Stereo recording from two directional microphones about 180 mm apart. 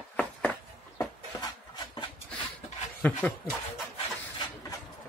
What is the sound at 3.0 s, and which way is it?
Speech, 10° left (ahead or behind).